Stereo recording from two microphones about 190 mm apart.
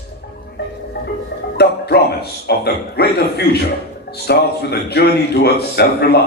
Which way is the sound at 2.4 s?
60° left (ahead or behind).